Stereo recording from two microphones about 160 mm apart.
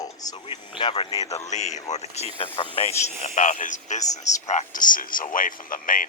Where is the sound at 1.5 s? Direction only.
45° left (ahead or behind).